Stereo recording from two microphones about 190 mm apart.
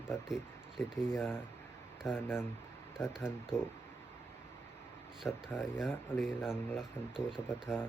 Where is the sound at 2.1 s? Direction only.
10° left (ahead or behind).